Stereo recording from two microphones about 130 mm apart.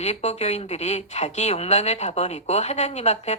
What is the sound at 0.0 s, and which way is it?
Speech, 60° left (ahead or behind).